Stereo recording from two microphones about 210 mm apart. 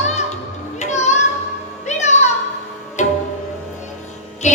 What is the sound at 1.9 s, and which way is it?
Music, 35° left (ahead or behind).